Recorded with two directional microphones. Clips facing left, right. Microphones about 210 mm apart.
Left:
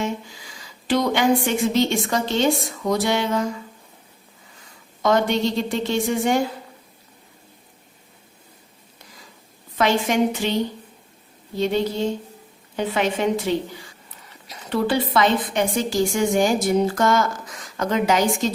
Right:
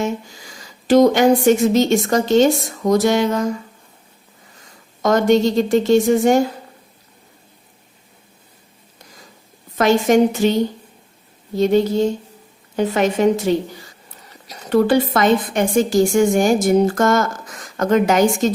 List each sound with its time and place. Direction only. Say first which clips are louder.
0.0 s a woman's voice: right 4 dB; 45° right (ahead or behind)
5.0 s a woman's voice: right 5 dB; 45° right (ahead or behind)
9.7 s a woman's voice: right 6 dB; 45° right (ahead or behind)